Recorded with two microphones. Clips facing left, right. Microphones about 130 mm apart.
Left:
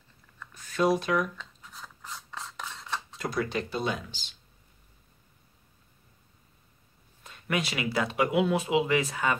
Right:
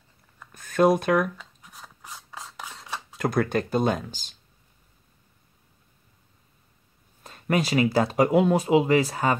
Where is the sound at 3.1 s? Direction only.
55° right (ahead or behind).